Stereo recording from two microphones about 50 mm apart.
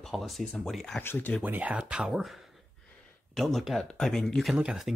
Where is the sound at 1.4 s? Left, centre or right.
Right.